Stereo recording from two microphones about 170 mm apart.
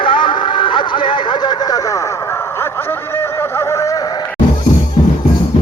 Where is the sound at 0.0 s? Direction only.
30° left (ahead or behind).